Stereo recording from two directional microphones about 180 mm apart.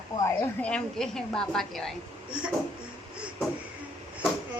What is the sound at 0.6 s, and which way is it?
A woman's voice, 5° left (ahead or behind).